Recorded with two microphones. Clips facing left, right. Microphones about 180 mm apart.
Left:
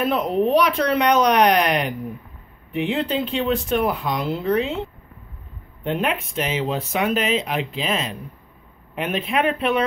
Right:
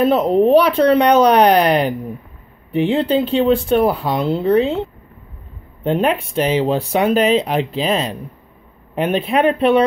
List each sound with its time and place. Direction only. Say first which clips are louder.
0.0 s speech: right 7 dB; 30° right (ahead or behind)
5.9 s speech: right 6 dB; 30° right (ahead or behind)